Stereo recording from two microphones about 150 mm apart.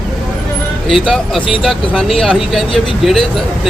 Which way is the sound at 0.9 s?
5° left (ahead or behind).